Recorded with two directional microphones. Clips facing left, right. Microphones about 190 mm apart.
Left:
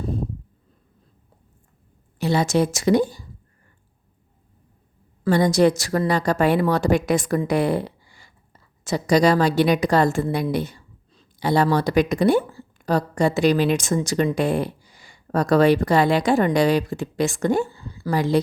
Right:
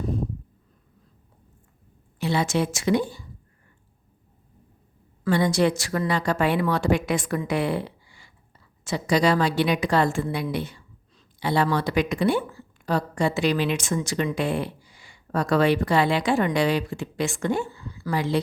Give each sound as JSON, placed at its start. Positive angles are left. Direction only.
{"t": 2.1, "sound": "a woman's voice", "side_deg": 40}
{"t": 5.2, "sound": "a woman's voice", "side_deg": 40}